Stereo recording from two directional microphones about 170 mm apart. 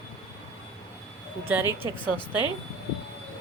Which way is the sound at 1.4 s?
10° right (ahead or behind).